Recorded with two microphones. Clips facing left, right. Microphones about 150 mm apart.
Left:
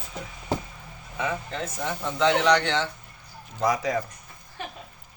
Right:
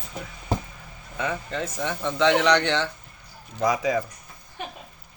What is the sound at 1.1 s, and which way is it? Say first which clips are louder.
Speech: right 1 dB; centre (ahead or behind).